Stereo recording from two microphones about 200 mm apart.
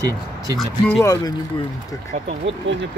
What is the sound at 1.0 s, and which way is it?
Speech, 15° left (ahead or behind).